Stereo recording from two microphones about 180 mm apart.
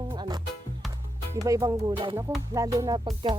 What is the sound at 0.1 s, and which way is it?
Music, 25° right (ahead or behind).